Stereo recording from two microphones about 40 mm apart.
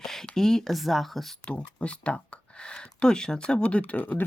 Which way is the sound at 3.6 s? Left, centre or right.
Left.